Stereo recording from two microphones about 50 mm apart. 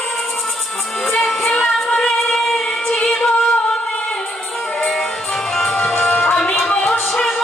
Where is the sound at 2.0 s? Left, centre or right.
Centre.